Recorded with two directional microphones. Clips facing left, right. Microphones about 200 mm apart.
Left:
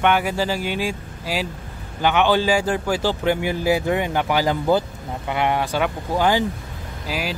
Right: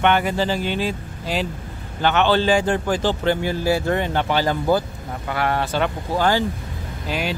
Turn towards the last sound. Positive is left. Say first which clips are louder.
# right 2 dB
turn(degrees=5)  # may be behind; listen again after turning